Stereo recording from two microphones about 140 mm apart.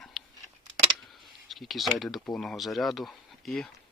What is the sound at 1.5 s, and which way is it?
Speech, centre (ahead or behind).